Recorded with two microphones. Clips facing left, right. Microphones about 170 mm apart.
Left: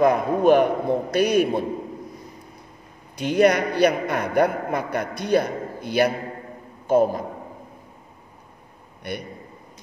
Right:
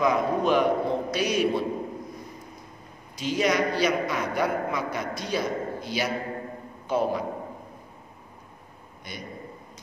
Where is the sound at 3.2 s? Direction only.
60° left (ahead or behind).